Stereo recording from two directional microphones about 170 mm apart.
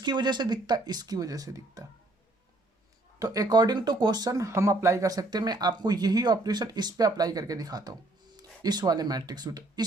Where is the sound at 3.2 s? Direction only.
20° right (ahead or behind).